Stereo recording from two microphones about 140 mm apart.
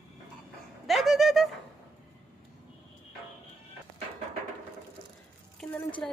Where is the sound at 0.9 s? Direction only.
Centre (ahead or behind).